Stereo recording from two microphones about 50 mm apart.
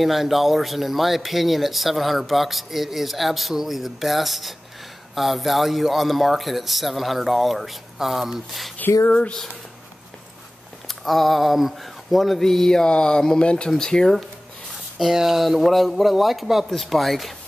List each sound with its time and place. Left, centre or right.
0.0 s speech: centre
8.7 s speech: left
9.1 s speech: left
10.9 s speech: centre
15.0 s speech: centre